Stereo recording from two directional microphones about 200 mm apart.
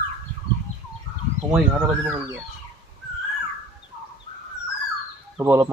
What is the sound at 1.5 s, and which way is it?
Speech, 5° right (ahead or behind).